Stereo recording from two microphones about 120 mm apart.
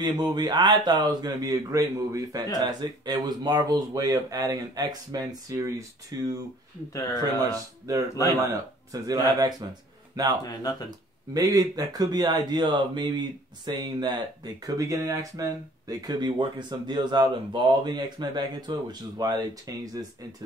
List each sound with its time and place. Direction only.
0.0 s speech: 35° right (ahead or behind)
7.9 s speech: 30° right (ahead or behind)
9.0 s speech: 30° right (ahead or behind)
11.3 s speech: 30° right (ahead or behind)